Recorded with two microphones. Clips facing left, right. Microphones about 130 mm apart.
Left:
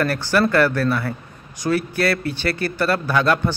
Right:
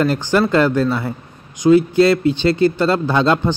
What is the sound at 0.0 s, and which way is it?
Speech, 20° right (ahead or behind).